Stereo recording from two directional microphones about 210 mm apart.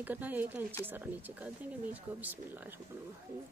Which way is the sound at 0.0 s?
10° right (ahead or behind).